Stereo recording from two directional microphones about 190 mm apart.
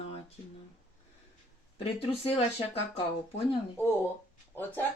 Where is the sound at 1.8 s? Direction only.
30° left (ahead or behind).